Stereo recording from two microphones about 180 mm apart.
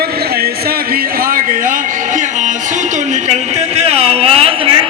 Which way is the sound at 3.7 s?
35° right (ahead or behind).